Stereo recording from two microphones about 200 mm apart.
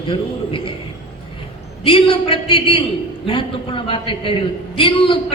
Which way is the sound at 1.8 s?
25° left (ahead or behind).